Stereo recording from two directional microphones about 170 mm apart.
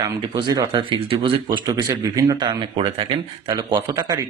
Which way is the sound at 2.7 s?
30° right (ahead or behind).